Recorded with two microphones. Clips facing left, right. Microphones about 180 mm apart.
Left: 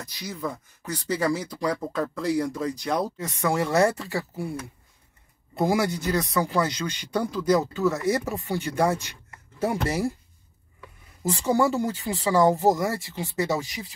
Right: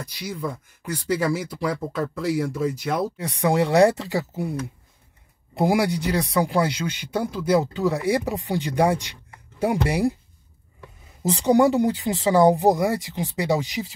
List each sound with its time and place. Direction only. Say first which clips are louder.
0.2 s speech: right 2 dB; 10° right (ahead or behind)
5.6 s speech: right 3 dB; 15° right (ahead or behind)
11.2 s speech: right 5 dB; 20° right (ahead or behind)